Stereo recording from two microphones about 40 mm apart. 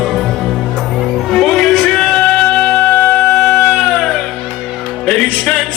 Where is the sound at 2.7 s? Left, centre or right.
Left.